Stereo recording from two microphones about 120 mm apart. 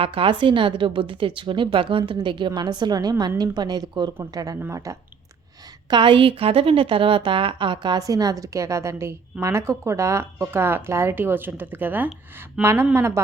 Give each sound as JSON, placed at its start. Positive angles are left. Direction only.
{"t": 0.0, "sound": "a woman's voice", "side_deg": -45}
{"t": 5.9, "sound": "a woman's voice", "side_deg": -45}